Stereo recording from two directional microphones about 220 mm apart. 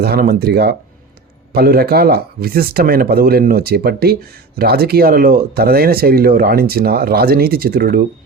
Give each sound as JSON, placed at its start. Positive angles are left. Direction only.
{"t": 0.0, "sound": "speech", "side_deg": -45}